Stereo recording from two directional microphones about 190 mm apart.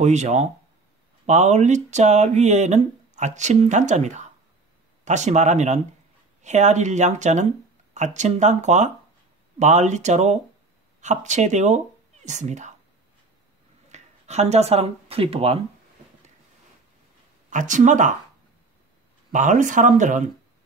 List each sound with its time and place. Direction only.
0.0 s speech: 35° right (ahead or behind)
13.8 s speech: 35° right (ahead or behind)
17.5 s speech: 40° right (ahead or behind)
19.3 s speech: 40° right (ahead or behind)